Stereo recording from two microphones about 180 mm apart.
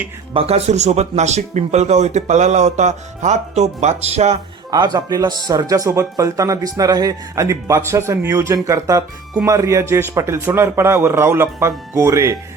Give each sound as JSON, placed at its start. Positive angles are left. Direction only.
{"t": 0.3, "sound": "speech", "side_deg": -35}
{"t": 4.7, "sound": "speech", "side_deg": -20}